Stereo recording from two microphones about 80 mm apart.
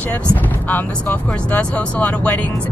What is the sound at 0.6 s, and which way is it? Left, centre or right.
Speech, centre.